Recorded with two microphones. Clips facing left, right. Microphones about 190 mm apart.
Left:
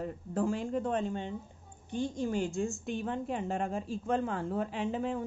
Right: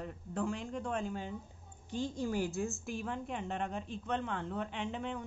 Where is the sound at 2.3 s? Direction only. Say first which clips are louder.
Left 3 dB; 10° right (ahead or behind).